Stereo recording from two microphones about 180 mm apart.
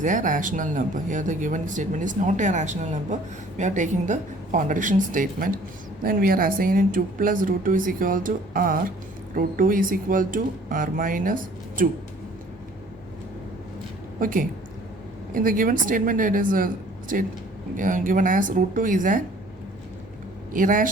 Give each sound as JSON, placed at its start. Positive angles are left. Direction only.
{"t": 0.0, "sound": "speech", "side_deg": -45}
{"t": 14.2, "sound": "speech", "side_deg": -50}
{"t": 20.5, "sound": "speech", "side_deg": -50}